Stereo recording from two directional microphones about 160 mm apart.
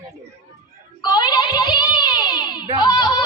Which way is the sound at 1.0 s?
25° left (ahead or behind).